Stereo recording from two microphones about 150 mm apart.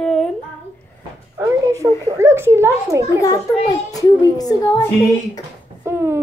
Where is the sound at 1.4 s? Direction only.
20° right (ahead or behind).